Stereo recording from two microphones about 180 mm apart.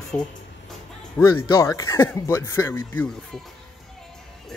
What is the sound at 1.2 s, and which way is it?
Speech, 15° left (ahead or behind).